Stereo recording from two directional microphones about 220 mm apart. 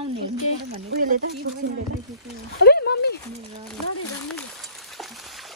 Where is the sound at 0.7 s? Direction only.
45° right (ahead or behind).